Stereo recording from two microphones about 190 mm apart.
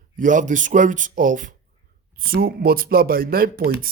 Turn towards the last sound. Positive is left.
turn(degrees=-50)  # may be behind; listen again after turning